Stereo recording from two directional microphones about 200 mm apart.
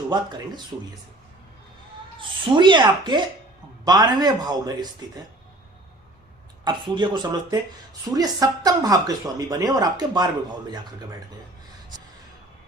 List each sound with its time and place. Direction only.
0.1 s speech: 20° right (ahead or behind)
2.2 s speech: 25° right (ahead or behind)
6.7 s speech: 25° right (ahead or behind)